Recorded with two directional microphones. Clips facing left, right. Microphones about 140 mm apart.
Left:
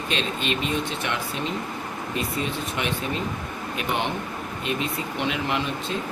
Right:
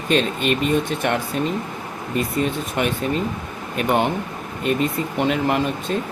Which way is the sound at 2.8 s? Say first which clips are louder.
Right 7 dB; 45° right (ahead or behind).